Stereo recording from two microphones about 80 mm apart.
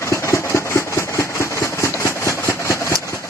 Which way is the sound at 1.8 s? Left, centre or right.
Left.